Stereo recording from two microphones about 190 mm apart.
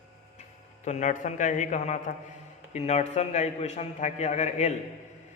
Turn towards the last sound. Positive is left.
turn(degrees=40)  # may be behind; listen again after turning